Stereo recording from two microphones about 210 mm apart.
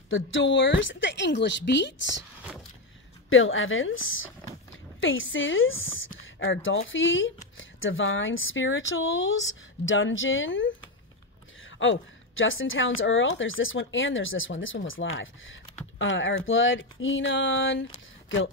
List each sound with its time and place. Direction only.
0.1 s a woman's voice: 65° left (ahead or behind)
3.3 s a woman's voice: 70° left (ahead or behind)